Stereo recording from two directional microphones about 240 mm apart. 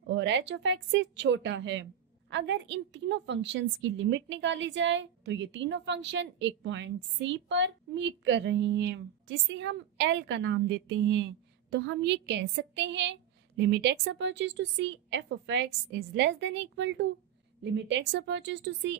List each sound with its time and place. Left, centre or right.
0.0 s speech: right